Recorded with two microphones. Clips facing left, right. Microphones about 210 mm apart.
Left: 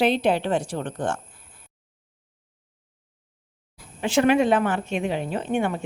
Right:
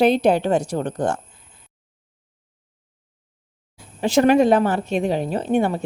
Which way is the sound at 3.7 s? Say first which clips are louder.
Right 4 dB; 40° right (ahead or behind).